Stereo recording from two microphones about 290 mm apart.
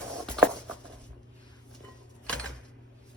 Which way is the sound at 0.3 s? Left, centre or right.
Centre.